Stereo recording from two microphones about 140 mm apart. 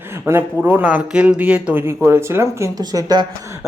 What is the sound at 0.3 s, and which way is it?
Speech, 15° right (ahead or behind).